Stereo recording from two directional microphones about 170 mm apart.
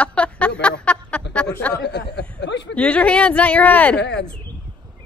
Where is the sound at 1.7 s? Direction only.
85° left.